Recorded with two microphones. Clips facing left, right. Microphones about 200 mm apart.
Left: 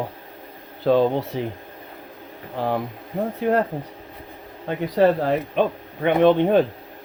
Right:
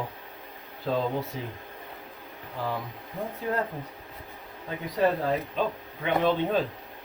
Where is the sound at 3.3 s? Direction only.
70° left (ahead or behind).